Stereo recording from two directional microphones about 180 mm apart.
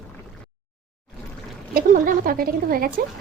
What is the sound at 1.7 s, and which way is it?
Speech, 50° right (ahead or behind).